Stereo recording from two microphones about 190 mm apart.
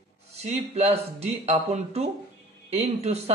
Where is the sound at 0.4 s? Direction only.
35° right (ahead or behind).